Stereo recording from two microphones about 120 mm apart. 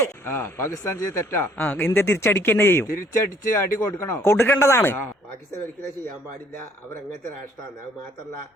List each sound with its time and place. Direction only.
0.0 s speech: 20° left (ahead or behind)